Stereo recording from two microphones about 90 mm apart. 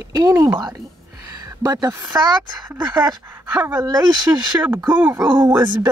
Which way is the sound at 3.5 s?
20° right (ahead or behind).